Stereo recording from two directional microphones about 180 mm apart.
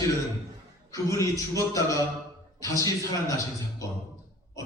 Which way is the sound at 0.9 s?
15° left (ahead or behind).